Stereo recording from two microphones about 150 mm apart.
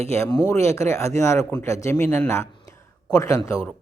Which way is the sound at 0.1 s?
20° left (ahead or behind).